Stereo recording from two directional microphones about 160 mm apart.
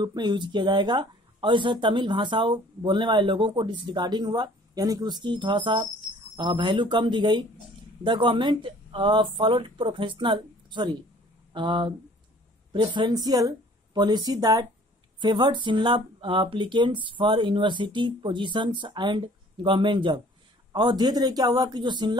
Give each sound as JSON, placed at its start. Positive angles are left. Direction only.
{"t": 0.0, "sound": "speech", "side_deg": -30}